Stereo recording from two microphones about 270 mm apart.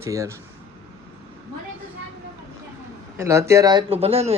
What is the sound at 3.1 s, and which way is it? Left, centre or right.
Speech, centre.